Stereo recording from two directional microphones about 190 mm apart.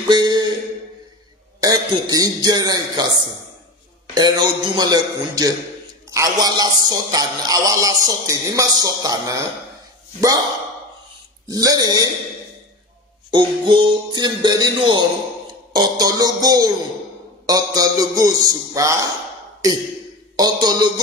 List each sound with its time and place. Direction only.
0.0 s a sound: 20° right (ahead or behind)
1.6 s a man's voice: 20° right (ahead or behind)
11.4 s a man's voice: 20° right (ahead or behind)
13.3 s a man's voice: 25° right (ahead or behind)